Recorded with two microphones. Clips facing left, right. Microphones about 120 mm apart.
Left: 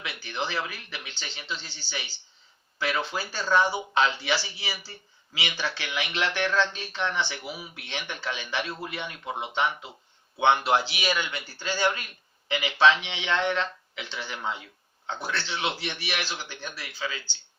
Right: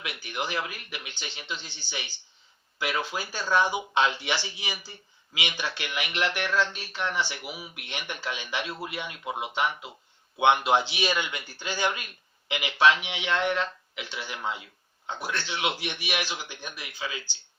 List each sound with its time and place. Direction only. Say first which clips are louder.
0.0 s speech: left 1 dB; 15° right (ahead or behind)